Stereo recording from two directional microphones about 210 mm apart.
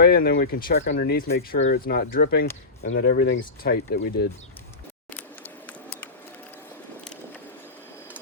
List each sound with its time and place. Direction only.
0.0 s speech: 45° left (ahead or behind)
2.8 s speech: 65° left (ahead or behind)
3.1 s speech: 55° left (ahead or behind)